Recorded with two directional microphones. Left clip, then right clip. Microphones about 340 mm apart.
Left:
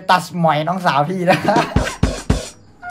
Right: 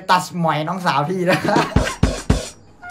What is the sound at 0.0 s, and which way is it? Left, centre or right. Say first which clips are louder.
Speech: left 2 dB; centre.